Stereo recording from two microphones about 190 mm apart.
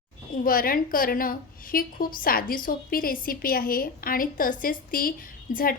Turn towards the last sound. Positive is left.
turn(degrees=50)  # may be behind; listen again after turning